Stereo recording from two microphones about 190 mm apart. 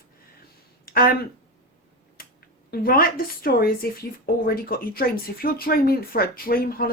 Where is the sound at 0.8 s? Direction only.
50° left (ahead or behind).